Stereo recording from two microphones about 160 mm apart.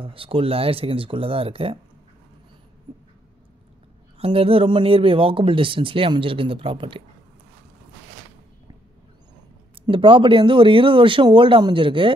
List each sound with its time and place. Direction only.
0.0 s speech: 35° right (ahead or behind)
4.2 s speech: 35° right (ahead or behind)
9.8 s speech: 35° right (ahead or behind)